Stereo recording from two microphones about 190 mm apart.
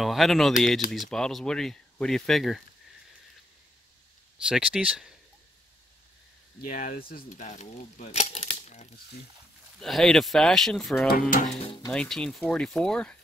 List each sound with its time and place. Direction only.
0.0 s speech: centre (ahead or behind)
4.5 s speech: 5° right (ahead or behind)
6.7 s speech: 50° left (ahead or behind)
9.8 s speech: centre (ahead or behind)
11.1 s speech: 45° left (ahead or behind)
11.6 s speech: 25° left (ahead or behind)
11.9 s speech: 5° left (ahead or behind)